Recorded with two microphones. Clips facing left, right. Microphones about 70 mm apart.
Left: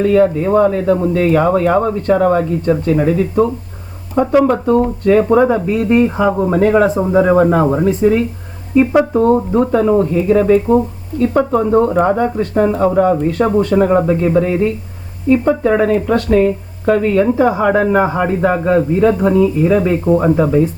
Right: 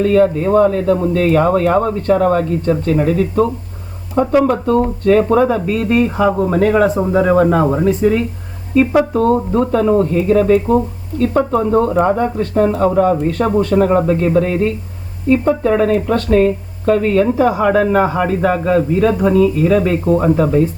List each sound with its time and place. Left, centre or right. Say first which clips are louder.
0.0 s speech: left 1 dB; centre
6.9 s speech: left 1 dB; centre
7.2 s a man's voice: left 1 dB; left; by 17.3 s centre
17.3 s a man's voice: even; centre